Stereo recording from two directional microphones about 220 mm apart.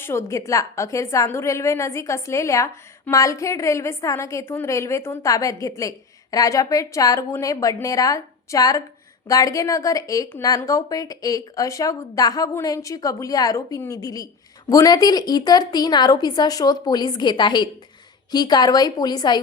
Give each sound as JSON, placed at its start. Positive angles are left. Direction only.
{"t": 0.0, "sound": "a woman's voice", "side_deg": 10}